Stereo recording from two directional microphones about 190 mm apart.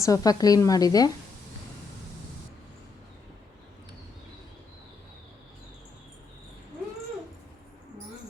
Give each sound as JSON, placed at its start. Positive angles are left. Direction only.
{"t": 0.0, "sound": "a woman's voice", "side_deg": 20}